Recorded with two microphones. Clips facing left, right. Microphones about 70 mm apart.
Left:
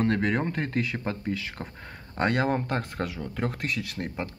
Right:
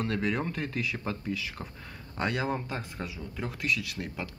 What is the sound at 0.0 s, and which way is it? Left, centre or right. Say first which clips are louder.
Speech: left 5 dB; left.